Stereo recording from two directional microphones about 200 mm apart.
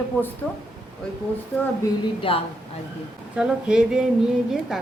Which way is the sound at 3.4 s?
5° right (ahead or behind).